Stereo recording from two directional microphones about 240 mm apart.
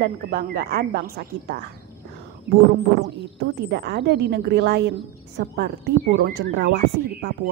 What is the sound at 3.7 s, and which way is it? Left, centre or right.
A woman's voice, right.